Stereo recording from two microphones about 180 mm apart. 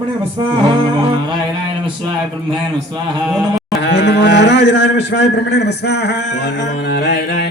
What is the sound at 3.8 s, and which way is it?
A man's voice, 75° left (ahead or behind).